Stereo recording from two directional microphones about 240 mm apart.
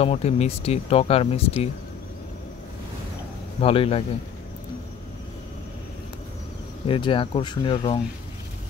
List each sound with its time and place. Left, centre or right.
0.0 s speech: left
3.6 s speech: left
6.9 s speech: left